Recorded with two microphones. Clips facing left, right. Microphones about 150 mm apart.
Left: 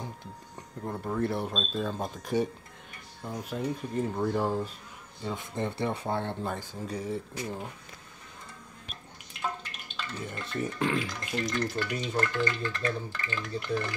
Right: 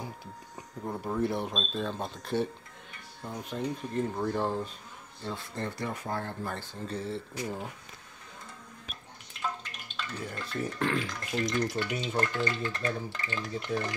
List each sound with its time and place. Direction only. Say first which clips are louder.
0.6 s speech: even; 5° right (ahead or behind)
5.2 s speech: left 3 dB; 15° left (ahead or behind)
6.5 s speech: left 1 dB; 10° left (ahead or behind)
7.4 s speech: even; 5° right (ahead or behind)
9.6 s speech: even; centre (ahead or behind)
11.5 s frying: right 1 dB; 15° right (ahead or behind)
12.4 s speech: left 1 dB; 20° right (ahead or behind)